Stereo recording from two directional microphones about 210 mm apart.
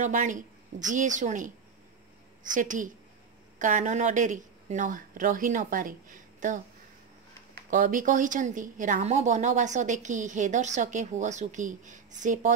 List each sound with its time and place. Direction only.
0.0 s a woman's voice: 35° right (ahead or behind)
2.5 s a woman's voice: 40° right (ahead or behind)
7.7 s a woman's voice: 40° right (ahead or behind)